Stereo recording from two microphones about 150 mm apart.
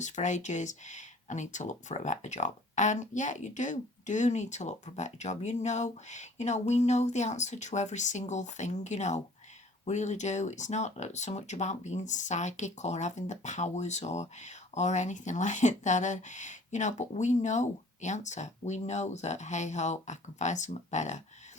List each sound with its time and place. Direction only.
0.0 s speech: 55° left (ahead or behind)